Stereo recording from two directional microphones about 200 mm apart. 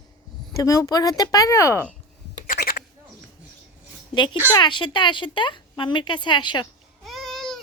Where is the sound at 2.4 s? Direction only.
45° left (ahead or behind).